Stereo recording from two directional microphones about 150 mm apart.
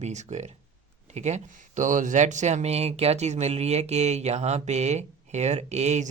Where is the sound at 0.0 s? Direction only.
50° right (ahead or behind).